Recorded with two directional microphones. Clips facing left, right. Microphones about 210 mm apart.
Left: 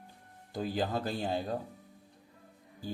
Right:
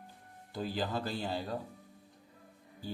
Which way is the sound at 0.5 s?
50° left (ahead or behind).